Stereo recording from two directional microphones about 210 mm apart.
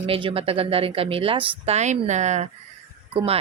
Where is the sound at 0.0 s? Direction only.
25° right (ahead or behind).